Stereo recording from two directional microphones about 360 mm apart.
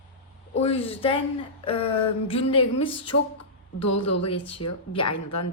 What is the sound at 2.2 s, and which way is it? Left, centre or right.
Speech, centre.